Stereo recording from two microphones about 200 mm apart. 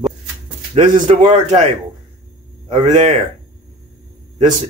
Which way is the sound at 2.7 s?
35° right (ahead or behind).